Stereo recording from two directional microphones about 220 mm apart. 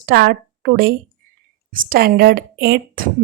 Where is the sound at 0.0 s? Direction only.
45° right (ahead or behind).